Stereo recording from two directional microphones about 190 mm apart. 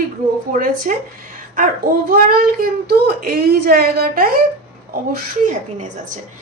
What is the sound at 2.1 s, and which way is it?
Speech, 55° right (ahead or behind).